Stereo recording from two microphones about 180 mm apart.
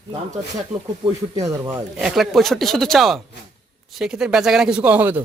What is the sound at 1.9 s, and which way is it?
Speech, centre (ahead or behind).